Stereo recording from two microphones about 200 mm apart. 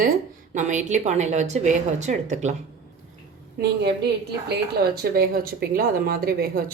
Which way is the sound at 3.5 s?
55° right (ahead or behind).